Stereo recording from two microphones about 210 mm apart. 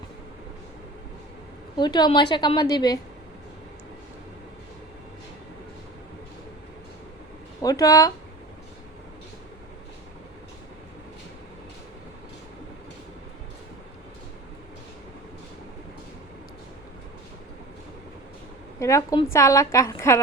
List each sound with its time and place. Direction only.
1.8 s a woman's voice: 20° left (ahead or behind)
7.6 s a woman's voice: 15° left (ahead or behind)
18.8 s a woman's voice: 15° left (ahead or behind)